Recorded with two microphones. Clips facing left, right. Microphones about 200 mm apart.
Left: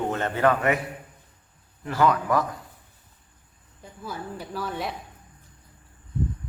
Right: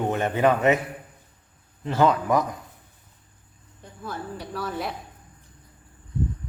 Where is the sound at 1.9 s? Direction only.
25° right (ahead or behind).